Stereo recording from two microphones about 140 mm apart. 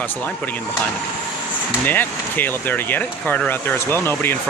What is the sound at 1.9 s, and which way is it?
Speech, 15° left (ahead or behind).